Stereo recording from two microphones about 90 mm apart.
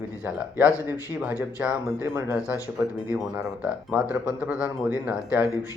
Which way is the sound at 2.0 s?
25° right (ahead or behind).